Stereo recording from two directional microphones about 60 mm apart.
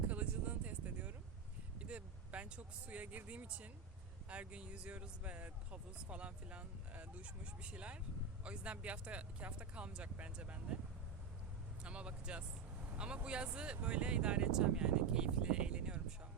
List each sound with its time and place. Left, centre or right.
0.1 s a sound: right
1.8 s speech: right
11.8 s speech: centre